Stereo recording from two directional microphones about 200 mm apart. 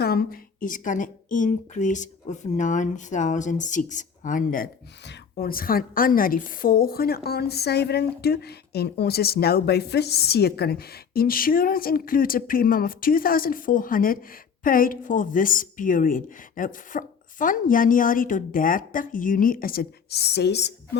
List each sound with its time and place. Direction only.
0.0 s speech: 50° left (ahead or behind)